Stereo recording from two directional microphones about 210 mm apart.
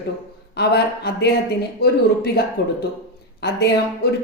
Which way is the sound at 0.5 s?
50° left (ahead or behind).